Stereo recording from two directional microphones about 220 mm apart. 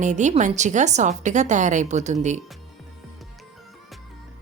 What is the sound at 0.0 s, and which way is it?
A woman's voice, 35° right (ahead or behind).